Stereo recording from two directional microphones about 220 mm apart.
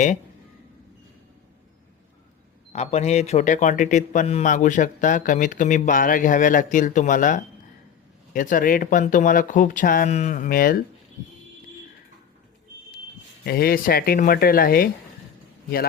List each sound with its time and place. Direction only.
2.7 s a man's voice: 30° left (ahead or behind)
13.4 s speech: 45° left (ahead or behind)